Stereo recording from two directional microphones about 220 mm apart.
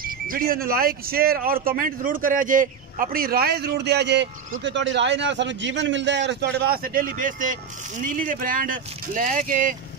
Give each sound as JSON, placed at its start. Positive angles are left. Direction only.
{"t": 0.0, "sound": "speech", "side_deg": -40}